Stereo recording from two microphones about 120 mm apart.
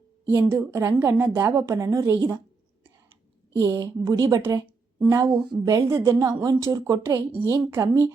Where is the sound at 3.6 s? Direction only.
25° right (ahead or behind).